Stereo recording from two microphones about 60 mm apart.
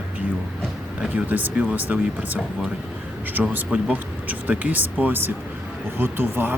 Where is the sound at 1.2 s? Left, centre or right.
Right.